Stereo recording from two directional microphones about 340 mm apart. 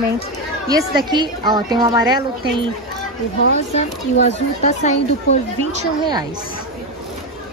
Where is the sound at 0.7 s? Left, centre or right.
Centre.